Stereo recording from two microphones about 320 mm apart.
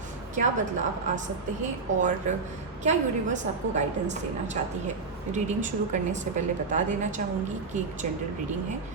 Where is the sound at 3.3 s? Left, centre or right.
Right.